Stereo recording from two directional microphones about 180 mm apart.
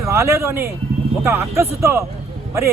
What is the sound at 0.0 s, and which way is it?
A man's voice, 15° right (ahead or behind).